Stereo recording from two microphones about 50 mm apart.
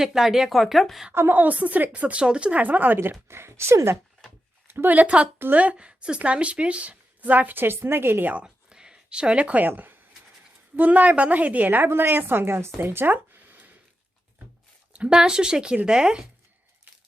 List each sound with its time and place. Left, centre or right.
0.0 s speech: centre
1.3 s a woman's voice: right
3.0 s speech: right
4.7 s speech: right
4.9 s a woman's voice: right
8.4 s a sound: centre
9.6 s a woman's voice: right
11.9 s a woman's voice: right
12.8 s a sound: right
14.9 s speech: centre